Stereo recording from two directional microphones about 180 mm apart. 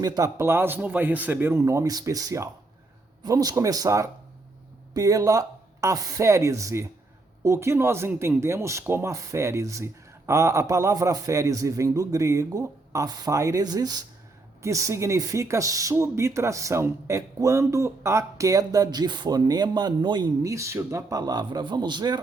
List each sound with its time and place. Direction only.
0.0 s speech: 20° right (ahead or behind)